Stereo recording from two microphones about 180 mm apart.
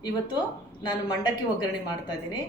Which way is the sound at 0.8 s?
25° left (ahead or behind).